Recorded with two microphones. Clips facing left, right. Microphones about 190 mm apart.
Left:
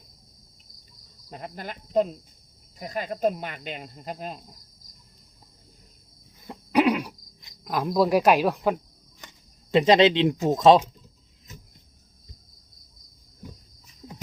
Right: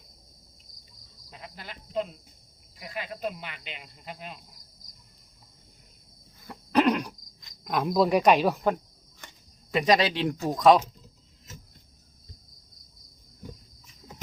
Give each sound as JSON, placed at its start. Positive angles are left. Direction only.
{"t": 1.3, "sound": "speech", "side_deg": 50}
{"t": 6.7, "sound": "throat clearing", "side_deg": 10}
{"t": 7.6, "sound": "speech", "side_deg": 0}
{"t": 9.7, "sound": "speech", "side_deg": 25}